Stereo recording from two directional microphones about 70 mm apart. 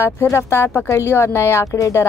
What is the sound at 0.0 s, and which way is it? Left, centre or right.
A woman's voice, left.